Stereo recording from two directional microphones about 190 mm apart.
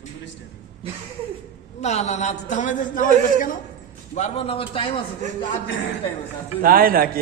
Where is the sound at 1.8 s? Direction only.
35° left (ahead or behind).